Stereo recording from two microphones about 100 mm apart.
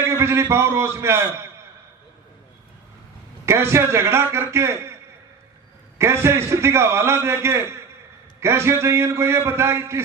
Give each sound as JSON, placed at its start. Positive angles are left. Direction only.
{"t": 0.0, "sound": "a sound", "side_deg": -25}
{"t": 0.5, "sound": "a man's voice", "side_deg": -25}
{"t": 3.4, "sound": "a man's voice", "side_deg": -25}
{"t": 6.0, "sound": "a man's voice", "side_deg": -25}